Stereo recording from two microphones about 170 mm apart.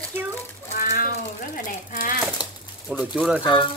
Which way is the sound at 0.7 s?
55° left (ahead or behind).